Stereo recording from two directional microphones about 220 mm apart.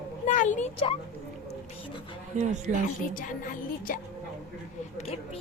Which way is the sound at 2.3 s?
35° right (ahead or behind).